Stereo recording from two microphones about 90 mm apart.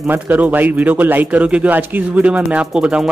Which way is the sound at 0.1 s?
20° right (ahead or behind).